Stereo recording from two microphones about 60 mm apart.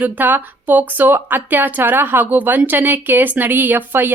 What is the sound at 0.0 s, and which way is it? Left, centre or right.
A woman's voice, right.